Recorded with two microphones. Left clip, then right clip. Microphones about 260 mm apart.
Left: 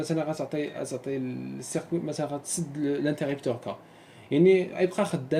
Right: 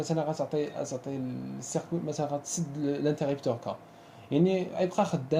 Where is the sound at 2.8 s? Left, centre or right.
Right.